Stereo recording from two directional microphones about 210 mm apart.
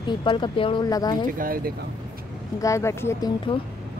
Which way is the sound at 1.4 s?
45° right (ahead or behind).